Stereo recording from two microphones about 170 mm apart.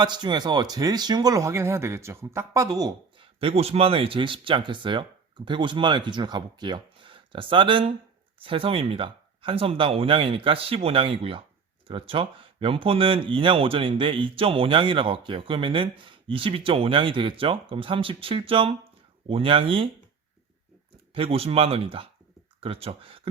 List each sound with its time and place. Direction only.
0.0 s speech: 25° right (ahead or behind)
3.4 s speech: 35° right (ahead or behind)
21.1 s speech: 35° right (ahead or behind)